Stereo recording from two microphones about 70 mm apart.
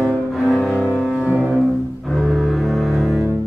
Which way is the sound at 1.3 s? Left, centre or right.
Right.